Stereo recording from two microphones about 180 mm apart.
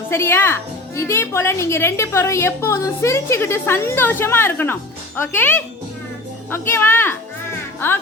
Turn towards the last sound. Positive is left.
turn(degrees=10)  # may be behind; listen again after turning